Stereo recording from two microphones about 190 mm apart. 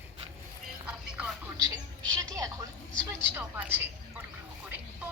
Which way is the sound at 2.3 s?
15° right (ahead or behind).